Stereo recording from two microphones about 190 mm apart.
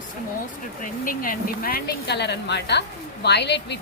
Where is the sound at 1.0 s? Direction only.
45° left (ahead or behind).